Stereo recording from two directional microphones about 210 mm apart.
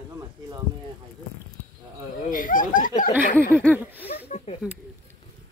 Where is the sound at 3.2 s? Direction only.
40° left (ahead or behind).